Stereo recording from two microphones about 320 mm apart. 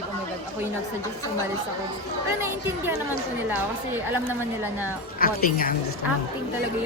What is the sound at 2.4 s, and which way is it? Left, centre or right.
Speech, centre.